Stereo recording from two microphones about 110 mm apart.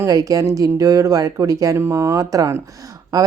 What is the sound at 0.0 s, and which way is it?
Speech, 30° right (ahead or behind).